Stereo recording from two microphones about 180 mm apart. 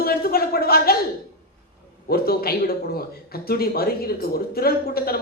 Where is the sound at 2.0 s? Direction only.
60° left (ahead or behind).